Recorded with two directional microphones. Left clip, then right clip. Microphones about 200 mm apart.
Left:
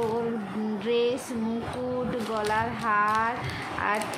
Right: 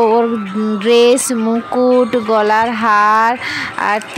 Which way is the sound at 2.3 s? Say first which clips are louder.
Right 14 dB; 55° right (ahead or behind).